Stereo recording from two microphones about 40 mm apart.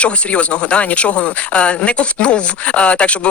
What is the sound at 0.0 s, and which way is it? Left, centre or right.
Speech, left.